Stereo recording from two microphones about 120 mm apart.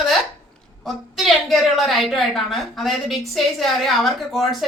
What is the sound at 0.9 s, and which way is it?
A woman's voice, centre (ahead or behind).